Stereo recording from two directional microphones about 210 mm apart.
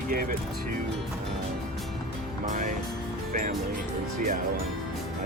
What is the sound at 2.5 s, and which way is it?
Speech, 40° right (ahead or behind).